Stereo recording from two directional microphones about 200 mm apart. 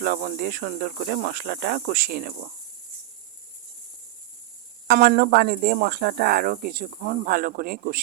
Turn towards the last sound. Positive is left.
turn(degrees=-50)  # may be behind; listen again after turning